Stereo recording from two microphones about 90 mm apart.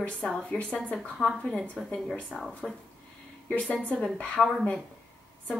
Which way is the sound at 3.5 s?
15° left (ahead or behind).